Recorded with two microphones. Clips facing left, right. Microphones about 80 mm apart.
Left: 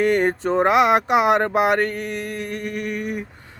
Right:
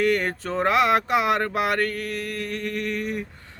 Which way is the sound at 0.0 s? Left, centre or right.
Left.